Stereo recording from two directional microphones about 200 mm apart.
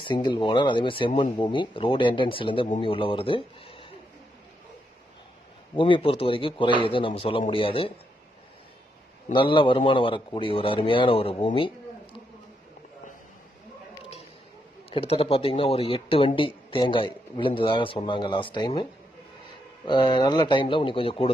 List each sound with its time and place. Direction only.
0.0 s speech: 25° left (ahead or behind)
5.8 s speech: 25° left (ahead or behind)
9.3 s speech: 25° left (ahead or behind)
14.9 s speech: 30° left (ahead or behind)
19.9 s speech: 20° left (ahead or behind)